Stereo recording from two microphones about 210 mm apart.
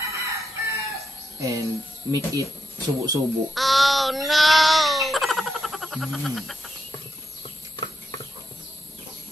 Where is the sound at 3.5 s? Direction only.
Centre (ahead or behind).